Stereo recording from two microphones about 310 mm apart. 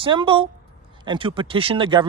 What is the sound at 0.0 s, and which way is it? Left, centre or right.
Speech, centre.